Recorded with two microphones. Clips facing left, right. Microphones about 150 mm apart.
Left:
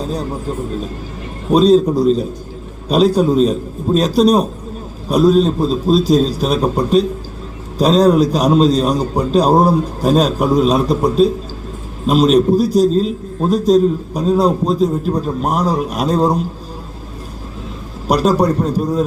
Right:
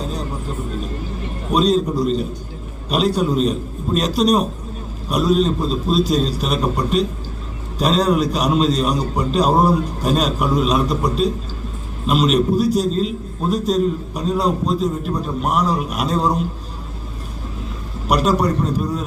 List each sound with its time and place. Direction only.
1.5 s a man's voice: 35° left (ahead or behind)
18.1 s a man's voice: 35° left (ahead or behind)